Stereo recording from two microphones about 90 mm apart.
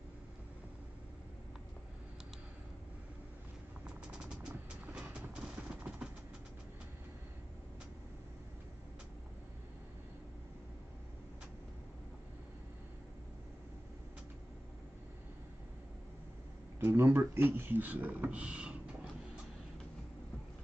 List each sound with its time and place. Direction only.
3.8 s vehicle: 10° right (ahead or behind)
16.8 s speech: 25° right (ahead or behind)